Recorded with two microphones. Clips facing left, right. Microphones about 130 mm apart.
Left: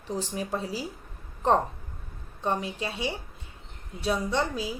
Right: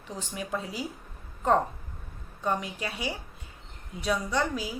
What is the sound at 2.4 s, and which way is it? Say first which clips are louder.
Speech: left 1 dB; 30° left (ahead or behind).